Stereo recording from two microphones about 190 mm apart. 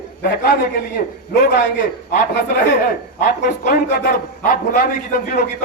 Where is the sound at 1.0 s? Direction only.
50° left (ahead or behind).